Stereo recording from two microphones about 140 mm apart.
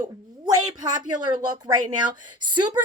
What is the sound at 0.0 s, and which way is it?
A woman's voice, 25° right (ahead or behind).